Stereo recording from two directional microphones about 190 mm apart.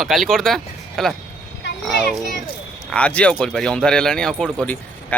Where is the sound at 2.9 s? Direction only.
5° left (ahead or behind).